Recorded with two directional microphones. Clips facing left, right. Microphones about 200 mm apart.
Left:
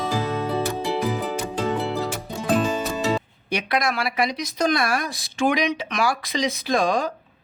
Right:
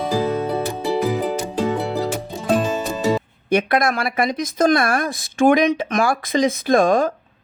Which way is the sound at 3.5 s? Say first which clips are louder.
Right 6 dB; 50° right (ahead or behind).